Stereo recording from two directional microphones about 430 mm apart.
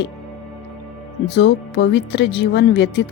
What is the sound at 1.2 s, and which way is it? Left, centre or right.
Speech, left.